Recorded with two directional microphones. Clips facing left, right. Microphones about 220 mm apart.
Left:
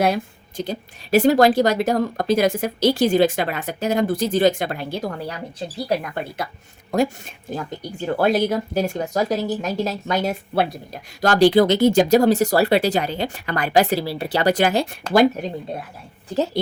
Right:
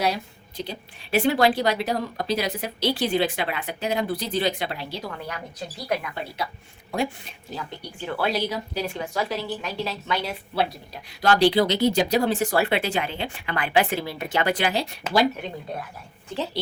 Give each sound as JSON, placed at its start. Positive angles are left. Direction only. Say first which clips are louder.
{"t": 0.0, "sound": "speech", "louder": "left 6 dB", "side_deg": 50}
{"t": 6.0, "sound": "speech", "louder": "left 4 dB", "side_deg": 45}